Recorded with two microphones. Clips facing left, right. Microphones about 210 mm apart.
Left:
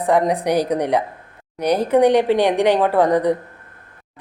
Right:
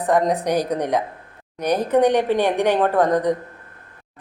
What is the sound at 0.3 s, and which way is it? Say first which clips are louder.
Speech: left 2 dB; 10° left (ahead or behind).